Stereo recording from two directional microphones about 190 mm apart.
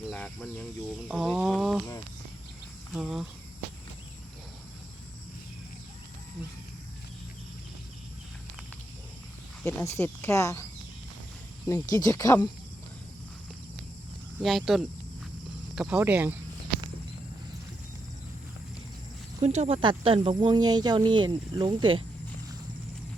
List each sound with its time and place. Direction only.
0.1 s speech: 5° left (ahead or behind)
0.9 s cricket: 5° right (ahead or behind)
2.9 s cricket: centre (ahead or behind)
9.6 s speech: 15° left (ahead or behind)
14.3 s cricket: centre (ahead or behind)
15.7 s speech: 5° right (ahead or behind)
19.4 s speech: 35° right (ahead or behind)